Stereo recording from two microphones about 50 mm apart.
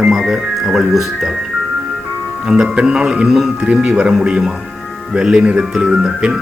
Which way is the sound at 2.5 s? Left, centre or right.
Centre.